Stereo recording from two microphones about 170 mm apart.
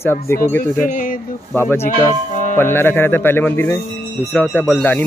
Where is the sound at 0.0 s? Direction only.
15° left (ahead or behind).